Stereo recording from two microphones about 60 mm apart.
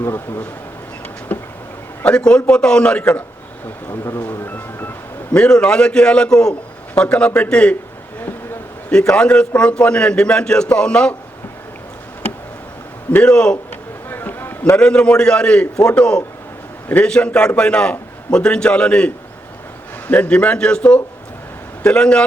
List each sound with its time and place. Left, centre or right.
0.0 s speech: left
1.3 s a sound: left
2.0 s a man's voice: centre
4.1 s music: left
5.4 s a man's voice: centre
6.5 s a sound: left
7.2 s a man's voice: left
8.9 s a man's voice: centre
13.2 s a man's voice: centre
14.1 s a sound: left
14.8 s a man's voice: centre